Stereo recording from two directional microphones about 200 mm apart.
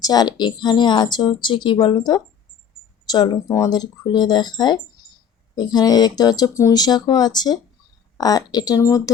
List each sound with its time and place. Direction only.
0.0 s a woman's voice: 20° left (ahead or behind)
5.0 s a sound: 20° left (ahead or behind)
5.5 s a woman's voice: 20° left (ahead or behind)